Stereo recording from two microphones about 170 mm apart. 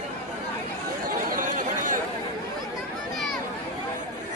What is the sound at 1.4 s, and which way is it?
Chatter, 50° right (ahead or behind).